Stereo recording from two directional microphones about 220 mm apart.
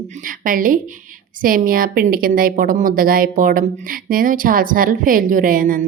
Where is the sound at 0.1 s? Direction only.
40° right (ahead or behind).